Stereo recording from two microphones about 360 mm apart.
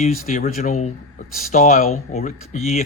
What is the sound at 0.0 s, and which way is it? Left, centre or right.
A man's voice, centre.